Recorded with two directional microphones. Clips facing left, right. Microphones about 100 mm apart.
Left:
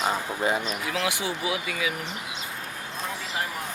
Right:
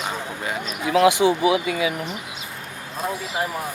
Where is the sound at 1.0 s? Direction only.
20° right (ahead or behind).